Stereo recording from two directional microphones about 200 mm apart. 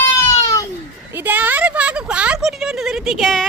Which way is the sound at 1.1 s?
10° right (ahead or behind).